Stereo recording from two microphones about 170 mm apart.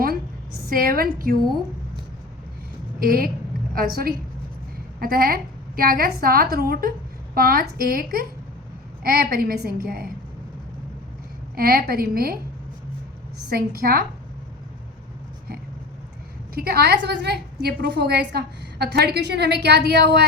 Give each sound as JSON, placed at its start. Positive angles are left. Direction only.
{"t": 0.0, "sound": "a sound", "side_deg": -60}
{"t": 3.0, "sound": "a woman's voice", "side_deg": -60}
{"t": 11.5, "sound": "a woman's voice", "side_deg": -60}
{"t": 13.5, "sound": "a woman's voice", "side_deg": -60}
{"t": 16.6, "sound": "a woman's voice", "side_deg": -70}